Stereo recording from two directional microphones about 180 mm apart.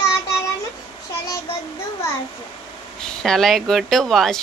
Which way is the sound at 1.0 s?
20° left (ahead or behind).